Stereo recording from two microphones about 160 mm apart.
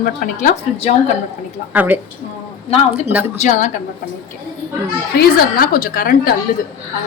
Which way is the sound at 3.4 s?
50° left (ahead or behind).